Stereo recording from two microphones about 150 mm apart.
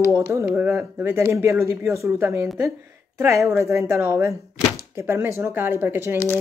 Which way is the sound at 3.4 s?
20° right (ahead or behind).